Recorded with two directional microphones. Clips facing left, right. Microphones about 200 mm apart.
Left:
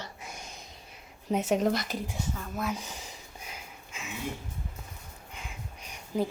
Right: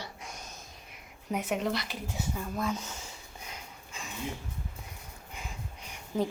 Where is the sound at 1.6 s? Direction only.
45° left (ahead or behind).